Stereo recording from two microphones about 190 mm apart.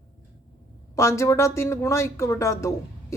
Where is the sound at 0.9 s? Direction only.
15° left (ahead or behind).